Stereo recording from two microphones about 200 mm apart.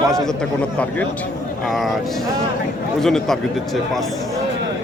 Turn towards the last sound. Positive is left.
turn(degrees=0)  # may be behind; listen again after turning